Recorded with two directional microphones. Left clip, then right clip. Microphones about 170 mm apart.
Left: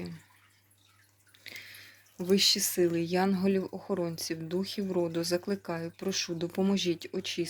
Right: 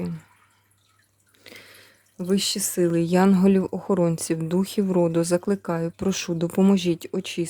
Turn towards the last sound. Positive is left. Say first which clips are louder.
# right 6 dB
turn(degrees=-45)  # may be behind; listen again after turning